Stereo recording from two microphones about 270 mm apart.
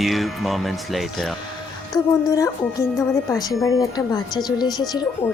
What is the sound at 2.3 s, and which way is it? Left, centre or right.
Speech, centre.